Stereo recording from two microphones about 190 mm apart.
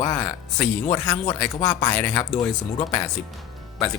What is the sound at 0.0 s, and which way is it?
Music, 15° left (ahead or behind).